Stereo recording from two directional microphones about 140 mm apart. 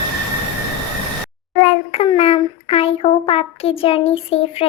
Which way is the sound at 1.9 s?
45° left (ahead or behind).